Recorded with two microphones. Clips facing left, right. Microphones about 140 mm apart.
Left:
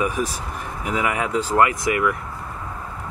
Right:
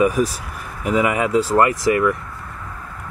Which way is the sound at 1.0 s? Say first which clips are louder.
Right 5 dB; centre (ahead or behind).